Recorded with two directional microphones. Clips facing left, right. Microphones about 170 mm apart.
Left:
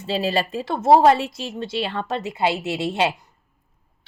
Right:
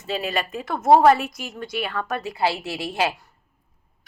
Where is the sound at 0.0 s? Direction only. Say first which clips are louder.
Left 4 dB; 30° left (ahead or behind).